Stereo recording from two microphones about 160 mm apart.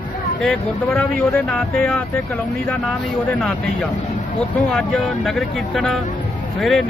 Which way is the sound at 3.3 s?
5° left (ahead or behind).